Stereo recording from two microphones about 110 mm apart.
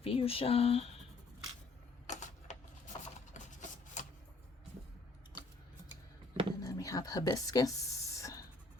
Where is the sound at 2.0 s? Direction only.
90° left.